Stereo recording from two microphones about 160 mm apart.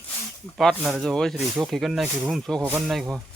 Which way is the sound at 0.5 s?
Centre (ahead or behind).